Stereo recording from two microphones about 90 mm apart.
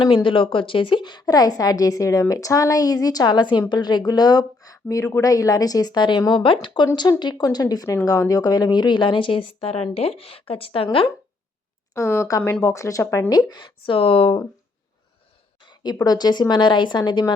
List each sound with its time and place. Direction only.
0.0 s a woman's voice: 70° left (ahead or behind)
6.9 s a woman's voice: 55° left (ahead or behind); by 10.8 s 90° left
11.9 s speech: 30° left (ahead or behind)
12.4 s speech: 15° left (ahead or behind)
12.6 s speech: 35° left (ahead or behind)
13.4 s a woman's voice: 55° left (ahead or behind)
13.9 s speech: 85° left
15.6 s a sound: 50° left (ahead or behind)
16.0 s a woman's voice: 50° left (ahead or behind)